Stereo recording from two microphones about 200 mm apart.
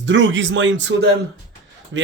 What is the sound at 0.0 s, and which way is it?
A man's voice, 65° right (ahead or behind).